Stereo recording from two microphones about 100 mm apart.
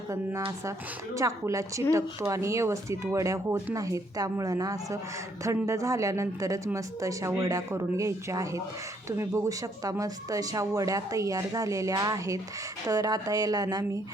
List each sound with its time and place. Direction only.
1.1 s speech: 30° right (ahead or behind)